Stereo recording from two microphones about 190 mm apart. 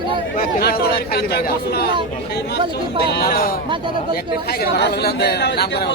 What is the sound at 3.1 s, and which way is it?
Speech, 55° left (ahead or behind).